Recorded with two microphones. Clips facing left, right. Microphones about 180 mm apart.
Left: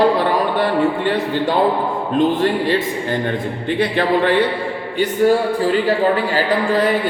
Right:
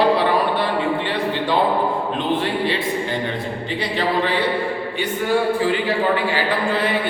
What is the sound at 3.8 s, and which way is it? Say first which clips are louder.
Speech: left 5 dB; 55° left (ahead or behind).